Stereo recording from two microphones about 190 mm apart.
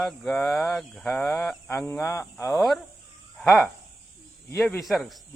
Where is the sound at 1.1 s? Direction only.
15° left (ahead or behind).